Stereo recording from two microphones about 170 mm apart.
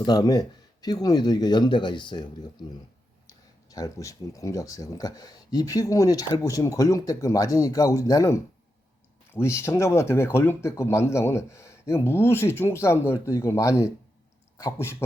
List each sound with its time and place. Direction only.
0.0 s speech: 20° left (ahead or behind)